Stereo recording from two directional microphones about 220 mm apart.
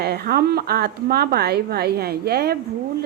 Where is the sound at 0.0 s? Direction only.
45° right (ahead or behind).